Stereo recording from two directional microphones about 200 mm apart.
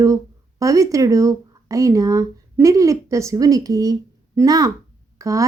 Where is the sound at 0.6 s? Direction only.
15° right (ahead or behind).